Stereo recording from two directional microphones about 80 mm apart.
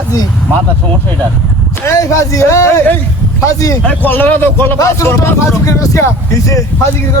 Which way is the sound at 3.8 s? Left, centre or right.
Left.